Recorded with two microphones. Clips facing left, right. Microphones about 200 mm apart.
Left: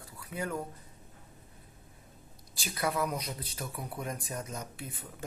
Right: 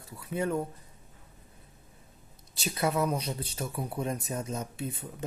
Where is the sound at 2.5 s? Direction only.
25° right (ahead or behind).